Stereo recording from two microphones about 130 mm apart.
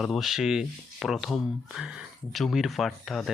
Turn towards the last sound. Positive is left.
turn(degrees=0)  # may be behind; listen again after turning